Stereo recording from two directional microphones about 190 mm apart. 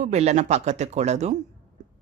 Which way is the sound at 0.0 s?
35° right (ahead or behind).